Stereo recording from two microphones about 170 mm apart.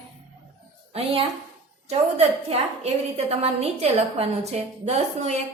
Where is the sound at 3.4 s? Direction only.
40° right (ahead or behind).